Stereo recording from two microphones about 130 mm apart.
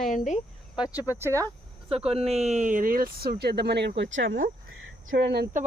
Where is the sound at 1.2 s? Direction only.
25° right (ahead or behind).